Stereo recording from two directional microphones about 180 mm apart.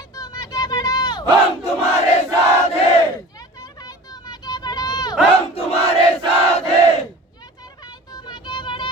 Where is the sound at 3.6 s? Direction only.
20° left (ahead or behind).